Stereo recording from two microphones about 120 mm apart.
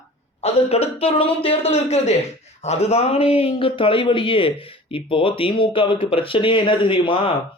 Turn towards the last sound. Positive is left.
turn(degrees=45)  # may be behind; listen again after turning